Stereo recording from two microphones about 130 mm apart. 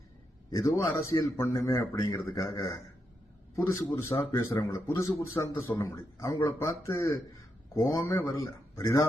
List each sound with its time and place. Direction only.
0.5 s a man's voice: 25° left (ahead or behind)